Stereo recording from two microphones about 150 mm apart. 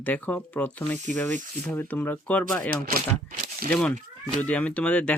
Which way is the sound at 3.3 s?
70° right (ahead or behind).